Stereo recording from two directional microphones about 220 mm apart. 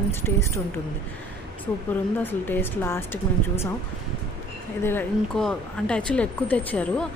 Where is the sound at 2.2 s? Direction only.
10° left (ahead or behind).